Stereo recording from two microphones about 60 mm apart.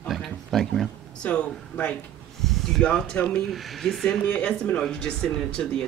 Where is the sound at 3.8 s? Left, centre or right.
Centre.